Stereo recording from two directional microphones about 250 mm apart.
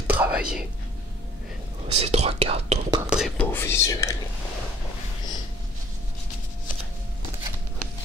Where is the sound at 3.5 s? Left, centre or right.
Centre.